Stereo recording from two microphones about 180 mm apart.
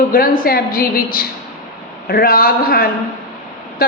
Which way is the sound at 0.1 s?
50° left (ahead or behind).